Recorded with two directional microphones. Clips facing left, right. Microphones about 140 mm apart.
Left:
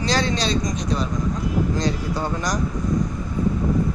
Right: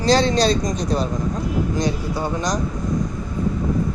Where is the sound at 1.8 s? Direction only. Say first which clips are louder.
Right 1 dB; 15° right (ahead or behind).